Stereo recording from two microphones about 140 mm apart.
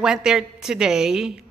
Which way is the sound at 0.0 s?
5° right (ahead or behind).